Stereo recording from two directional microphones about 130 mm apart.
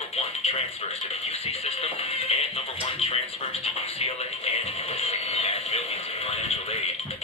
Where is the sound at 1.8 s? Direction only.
50° left (ahead or behind).